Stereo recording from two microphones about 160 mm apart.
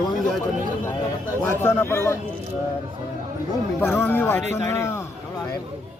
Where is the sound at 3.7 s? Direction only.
15° left (ahead or behind).